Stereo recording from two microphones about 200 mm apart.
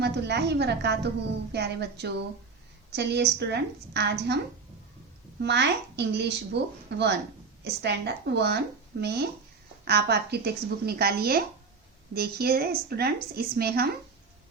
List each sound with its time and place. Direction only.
0.0 s speech: 55° right (ahead or behind)
5.4 s a woman's voice: 55° right (ahead or behind)